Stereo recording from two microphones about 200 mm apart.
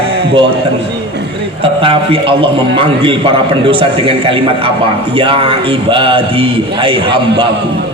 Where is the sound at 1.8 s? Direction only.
25° right (ahead or behind).